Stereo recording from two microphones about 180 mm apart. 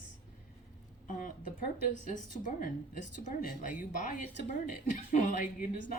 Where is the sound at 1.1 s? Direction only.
45° left (ahead or behind).